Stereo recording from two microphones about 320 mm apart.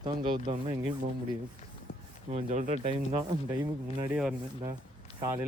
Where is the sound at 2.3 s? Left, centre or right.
Right.